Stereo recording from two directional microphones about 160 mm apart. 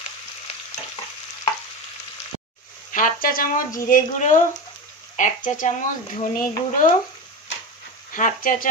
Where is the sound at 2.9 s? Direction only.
60° left (ahead or behind).